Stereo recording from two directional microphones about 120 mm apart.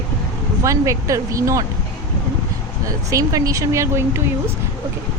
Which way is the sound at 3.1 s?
25° right (ahead or behind).